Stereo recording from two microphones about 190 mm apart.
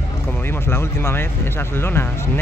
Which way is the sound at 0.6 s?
10° left (ahead or behind).